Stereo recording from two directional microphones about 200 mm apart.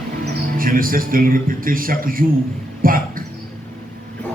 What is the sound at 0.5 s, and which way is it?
Speech, 45° right (ahead or behind).